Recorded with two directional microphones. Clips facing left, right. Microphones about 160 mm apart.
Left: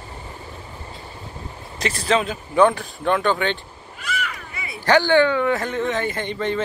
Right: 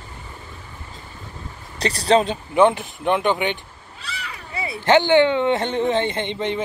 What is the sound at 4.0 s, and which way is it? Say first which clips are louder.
Speech: left 6 dB; 30° right (ahead or behind).